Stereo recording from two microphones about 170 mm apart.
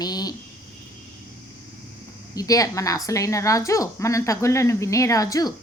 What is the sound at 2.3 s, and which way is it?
Speech, 20° left (ahead or behind).